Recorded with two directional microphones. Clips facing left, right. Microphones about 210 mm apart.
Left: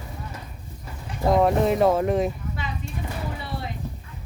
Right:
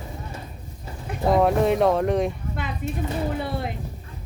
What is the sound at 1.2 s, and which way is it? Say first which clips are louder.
Speech: even; centre (ahead or behind).